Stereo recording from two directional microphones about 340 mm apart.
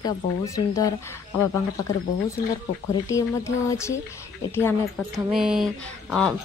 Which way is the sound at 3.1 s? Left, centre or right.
Centre.